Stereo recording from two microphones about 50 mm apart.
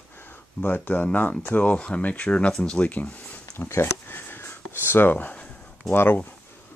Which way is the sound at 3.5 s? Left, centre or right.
Left.